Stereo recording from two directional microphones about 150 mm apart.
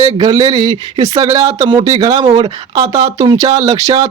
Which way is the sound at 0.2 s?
30° right (ahead or behind).